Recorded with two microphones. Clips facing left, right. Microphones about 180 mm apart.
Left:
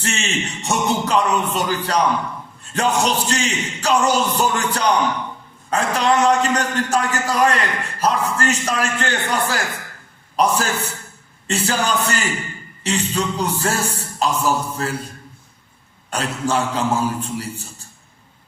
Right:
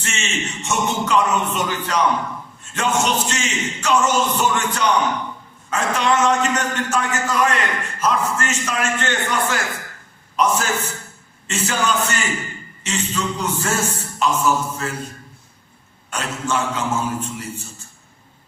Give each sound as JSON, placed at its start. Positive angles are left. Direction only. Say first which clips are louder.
{"t": 0.0, "sound": "a man's voice", "louder": "left 3 dB", "side_deg": 35}
{"t": 16.0, "sound": "a man's voice", "louder": "left 3 dB", "side_deg": 35}